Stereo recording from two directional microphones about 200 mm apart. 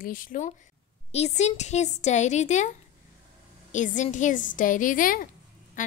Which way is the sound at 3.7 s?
40° left (ahead or behind).